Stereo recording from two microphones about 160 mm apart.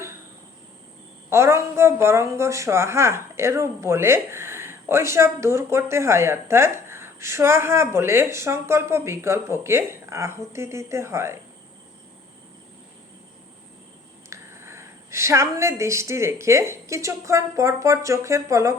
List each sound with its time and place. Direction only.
1.3 s a woman's voice: 15° right (ahead or behind)
14.3 s a woman's voice: 15° right (ahead or behind)